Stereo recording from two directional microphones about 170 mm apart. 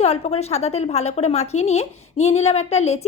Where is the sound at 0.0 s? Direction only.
40° left (ahead or behind).